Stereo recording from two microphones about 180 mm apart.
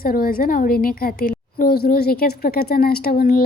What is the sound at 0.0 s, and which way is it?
Speech, 55° left (ahead or behind).